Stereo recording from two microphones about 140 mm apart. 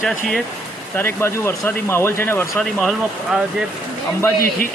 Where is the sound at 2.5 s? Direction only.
Centre (ahead or behind).